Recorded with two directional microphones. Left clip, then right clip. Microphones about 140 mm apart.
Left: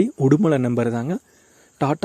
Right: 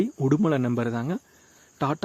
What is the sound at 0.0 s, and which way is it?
Speech, 35° left (ahead or behind).